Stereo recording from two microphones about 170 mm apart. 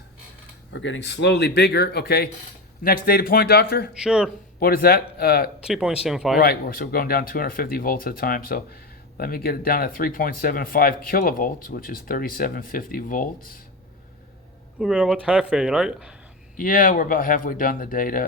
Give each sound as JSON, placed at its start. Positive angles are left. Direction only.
{"t": 0.7, "sound": "speech", "side_deg": 90}
{"t": 2.8, "sound": "speech", "side_deg": 60}
{"t": 4.0, "sound": "speech", "side_deg": -5}
{"t": 4.6, "sound": "speech", "side_deg": 65}
{"t": 5.6, "sound": "speech", "side_deg": -5}
{"t": 6.4, "sound": "speech", "side_deg": 65}
{"t": 14.8, "sound": "speech", "side_deg": -5}
{"t": 16.6, "sound": "speech", "side_deg": 55}